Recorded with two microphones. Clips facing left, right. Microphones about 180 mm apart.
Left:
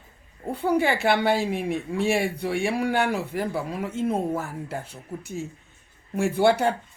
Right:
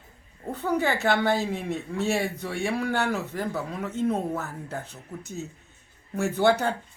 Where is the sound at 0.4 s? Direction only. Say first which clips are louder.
Left 3 dB; 10° left (ahead or behind).